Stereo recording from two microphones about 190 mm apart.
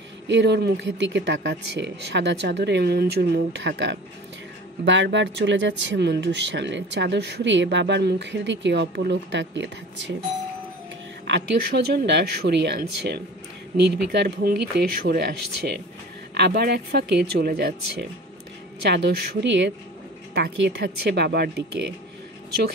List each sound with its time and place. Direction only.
0.3 s speech: 65° right (ahead or behind)
11.2 s speech: 65° right (ahead or behind)
18.9 s speech: 65° right (ahead or behind)